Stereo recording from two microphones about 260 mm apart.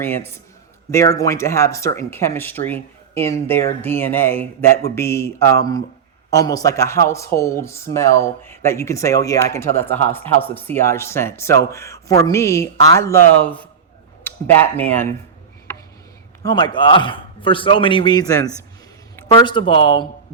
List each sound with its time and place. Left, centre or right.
0.0 s speech: centre
16.4 s speech: centre